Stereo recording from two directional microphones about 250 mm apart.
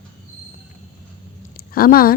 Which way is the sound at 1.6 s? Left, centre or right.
Left.